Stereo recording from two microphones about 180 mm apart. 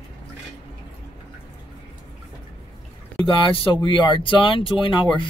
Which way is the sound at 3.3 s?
30° left (ahead or behind).